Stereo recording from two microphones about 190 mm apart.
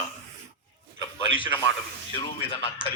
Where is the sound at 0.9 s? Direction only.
25° left (ahead or behind).